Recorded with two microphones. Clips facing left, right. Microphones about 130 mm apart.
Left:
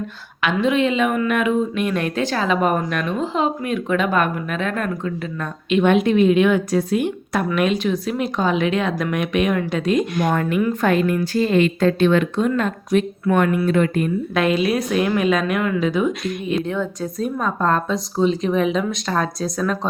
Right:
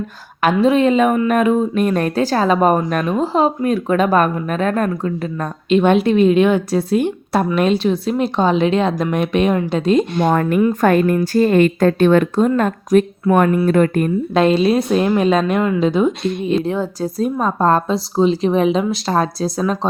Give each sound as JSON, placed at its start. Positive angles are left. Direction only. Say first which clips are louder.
{"t": 0.4, "sound": "a woman's voice", "louder": "right 5 dB", "side_deg": -40}
{"t": 10.6, "sound": "a woman's voice", "louder": "right 5 dB", "side_deg": -40}
{"t": 14.3, "sound": "a woman's voice", "louder": "right 5 dB", "side_deg": -30}